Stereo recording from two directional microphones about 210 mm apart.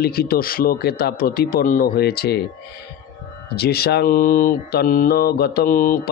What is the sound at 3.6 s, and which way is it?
Speech, 50° left (ahead or behind).